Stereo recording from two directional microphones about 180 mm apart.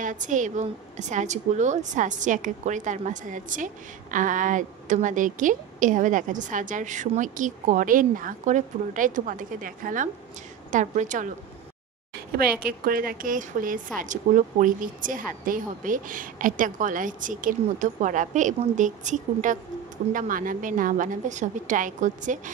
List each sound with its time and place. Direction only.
0.0 s a woman's voice: 45° right (ahead or behind)
12.3 s a woman's voice: 55° right (ahead or behind)